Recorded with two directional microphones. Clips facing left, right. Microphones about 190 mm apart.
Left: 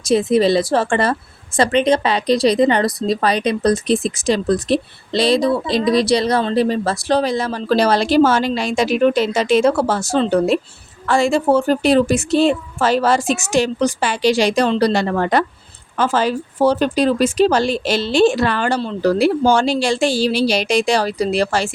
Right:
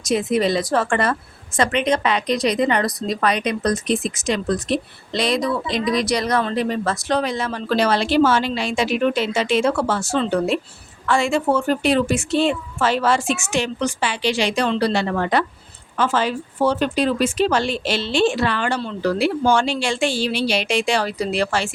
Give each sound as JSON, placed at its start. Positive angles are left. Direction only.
{"t": 0.0, "sound": "speech", "side_deg": 30}